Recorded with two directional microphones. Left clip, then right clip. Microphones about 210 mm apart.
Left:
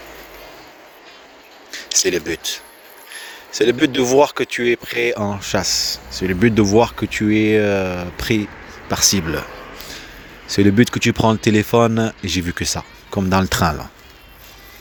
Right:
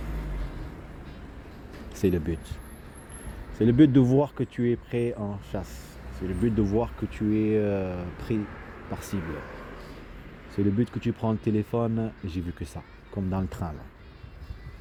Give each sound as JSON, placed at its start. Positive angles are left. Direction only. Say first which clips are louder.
{"t": 2.0, "sound": "speech", "louder": "left 9 dB", "side_deg": 20}
{"t": 3.7, "sound": "speech", "louder": "left 3 dB", "side_deg": 20}
{"t": 10.5, "sound": "speech", "louder": "left 13 dB", "side_deg": 20}
{"t": 13.6, "sound": "a man's voice", "louder": "left 19 dB", "side_deg": 50}